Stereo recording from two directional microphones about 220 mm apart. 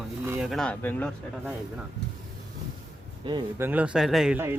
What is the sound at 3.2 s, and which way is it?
Speech, 20° right (ahead or behind).